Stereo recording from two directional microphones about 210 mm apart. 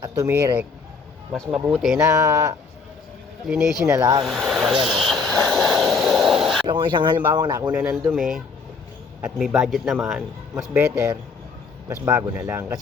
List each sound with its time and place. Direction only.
0.0 s speech: 15° right (ahead or behind)
1.3 s a man's voice: 5° right (ahead or behind)
2.0 s speech: 15° right (ahead or behind)
3.4 s a man's voice: centre (ahead or behind)
3.8 s speech: 15° right (ahead or behind)
4.2 s speech: centre (ahead or behind)
4.9 s a sound: centre (ahead or behind)
6.7 s a man's voice: 20° right (ahead or behind)
12.1 s speech: 10° right (ahead or behind)